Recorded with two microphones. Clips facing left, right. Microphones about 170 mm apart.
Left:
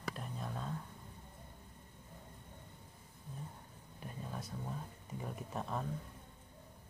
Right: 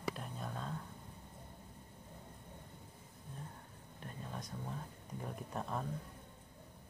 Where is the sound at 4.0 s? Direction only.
5° left (ahead or behind).